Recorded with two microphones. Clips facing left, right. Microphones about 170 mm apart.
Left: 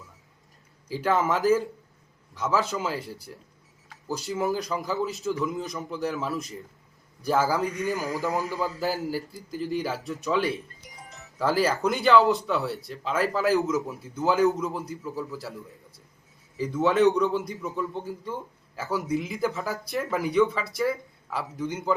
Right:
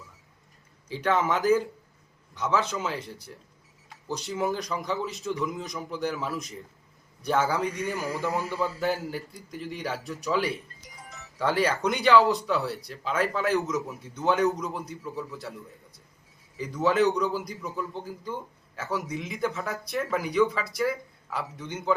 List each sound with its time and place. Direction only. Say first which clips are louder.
0.9 s speech: left 1 dB; 5° left (ahead or behind)
7.9 s a man's voice: left 1 dB; 40° left (ahead or behind)
8.8 s speech: left 1 dB; centre (ahead or behind)